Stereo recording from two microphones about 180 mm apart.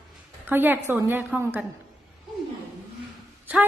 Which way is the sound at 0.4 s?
10° right (ahead or behind).